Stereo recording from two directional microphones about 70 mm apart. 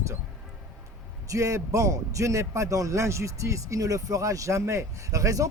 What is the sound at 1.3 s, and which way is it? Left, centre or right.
Speech, right.